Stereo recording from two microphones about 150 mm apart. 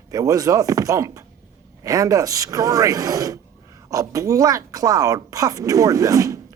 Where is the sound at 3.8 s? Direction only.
20° right (ahead or behind).